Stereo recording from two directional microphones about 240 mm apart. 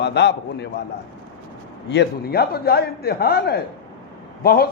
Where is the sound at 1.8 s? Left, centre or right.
Left.